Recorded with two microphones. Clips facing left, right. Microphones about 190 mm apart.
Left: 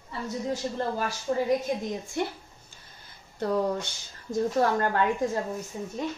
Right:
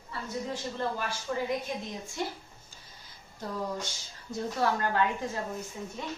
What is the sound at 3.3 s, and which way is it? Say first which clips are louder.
Speech: left 8 dB; 65° left (ahead or behind).